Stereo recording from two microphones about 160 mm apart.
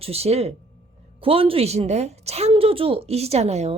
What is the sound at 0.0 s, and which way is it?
A woman's voice, 40° right (ahead or behind).